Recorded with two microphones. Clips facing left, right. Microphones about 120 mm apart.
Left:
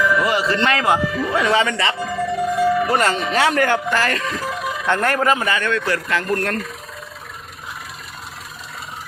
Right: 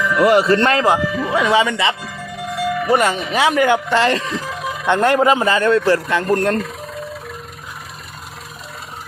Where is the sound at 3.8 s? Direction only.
25° right (ahead or behind).